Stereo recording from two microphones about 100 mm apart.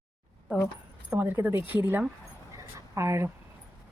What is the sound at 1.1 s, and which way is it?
Speech, 20° right (ahead or behind).